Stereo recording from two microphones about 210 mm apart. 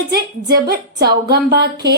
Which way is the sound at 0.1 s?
50° right (ahead or behind).